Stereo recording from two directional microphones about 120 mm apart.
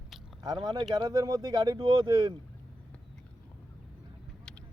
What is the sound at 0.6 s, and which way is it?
Speech, 35° right (ahead or behind).